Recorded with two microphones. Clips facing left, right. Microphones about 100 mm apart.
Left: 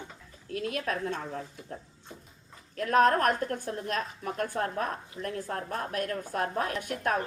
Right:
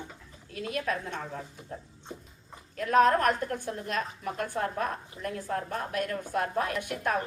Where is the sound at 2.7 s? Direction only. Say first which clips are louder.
Right 1 dB; 45° left (ahead or behind).